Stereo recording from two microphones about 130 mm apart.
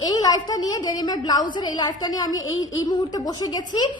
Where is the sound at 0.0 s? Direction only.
30° left (ahead or behind).